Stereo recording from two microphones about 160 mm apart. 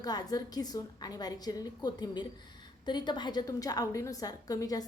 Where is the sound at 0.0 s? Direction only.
25° left (ahead or behind).